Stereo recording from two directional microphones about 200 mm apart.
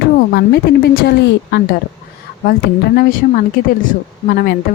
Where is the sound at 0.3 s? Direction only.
55° left (ahead or behind).